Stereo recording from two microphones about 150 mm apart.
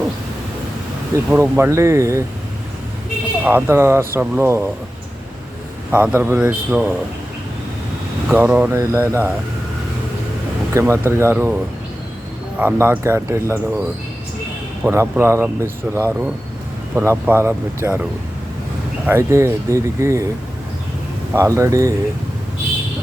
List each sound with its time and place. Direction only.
1.1 s speech: 15° right (ahead or behind)
3.4 s speech: 15° right (ahead or behind)
5.9 s speech: 10° right (ahead or behind)
8.3 s speech: 10° right (ahead or behind)
10.8 s speech: 15° right (ahead or behind)
12.5 s speech: 10° right (ahead or behind)
14.8 s speech: 15° right (ahead or behind)
19.0 s speech: 15° right (ahead or behind)
21.3 s speech: 20° right (ahead or behind)